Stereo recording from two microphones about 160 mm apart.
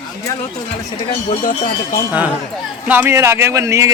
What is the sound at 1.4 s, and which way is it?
Speech, 60° left (ahead or behind).